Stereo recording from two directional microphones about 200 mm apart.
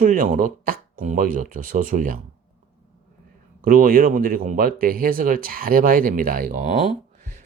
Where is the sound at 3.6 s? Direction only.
45° right (ahead or behind).